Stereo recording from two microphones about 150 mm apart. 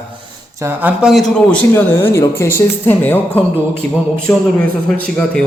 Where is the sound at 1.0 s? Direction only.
Centre (ahead or behind).